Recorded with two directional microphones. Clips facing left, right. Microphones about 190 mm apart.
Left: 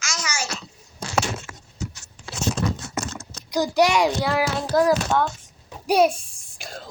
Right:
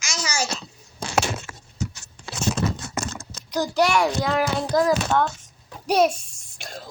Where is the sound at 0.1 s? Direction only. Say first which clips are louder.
Right 3 dB; 35° right (ahead or behind).